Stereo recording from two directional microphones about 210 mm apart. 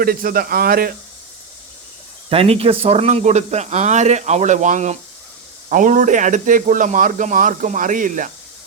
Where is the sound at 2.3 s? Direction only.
25° right (ahead or behind).